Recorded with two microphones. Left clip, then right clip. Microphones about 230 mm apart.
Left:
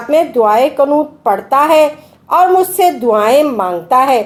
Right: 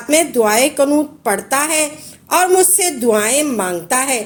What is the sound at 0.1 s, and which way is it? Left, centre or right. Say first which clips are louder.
A woman's voice: left 4 dB; right.